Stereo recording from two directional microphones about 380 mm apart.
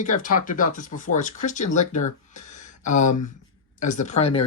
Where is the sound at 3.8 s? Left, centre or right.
Centre.